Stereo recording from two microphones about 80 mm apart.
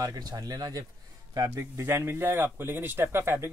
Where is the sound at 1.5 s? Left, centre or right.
Right.